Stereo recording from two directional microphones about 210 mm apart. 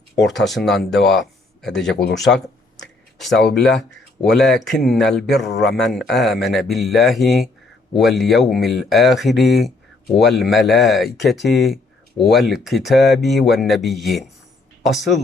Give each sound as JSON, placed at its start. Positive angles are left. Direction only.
{"t": 0.3, "sound": "speech", "side_deg": 0}
{"t": 3.2, "sound": "speech", "side_deg": 0}
{"t": 5.5, "sound": "a man's voice", "side_deg": 55}
{"t": 5.9, "sound": "speech", "side_deg": 0}